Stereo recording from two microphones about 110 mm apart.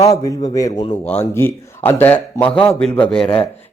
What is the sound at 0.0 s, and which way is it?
A man's voice, 30° left (ahead or behind).